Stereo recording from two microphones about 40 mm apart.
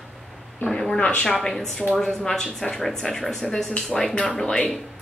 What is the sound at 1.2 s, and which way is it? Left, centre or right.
A woman's voice, centre.